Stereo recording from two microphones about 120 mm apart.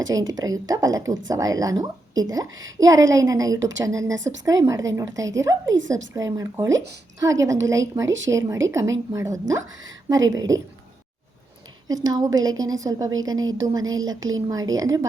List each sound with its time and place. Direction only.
0.1 s speech: 30° right (ahead or behind)
11.9 s a woman's voice: 30° right (ahead or behind)